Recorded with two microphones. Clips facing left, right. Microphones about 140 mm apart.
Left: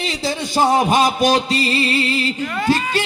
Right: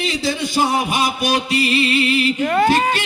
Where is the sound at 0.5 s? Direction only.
45° left (ahead or behind).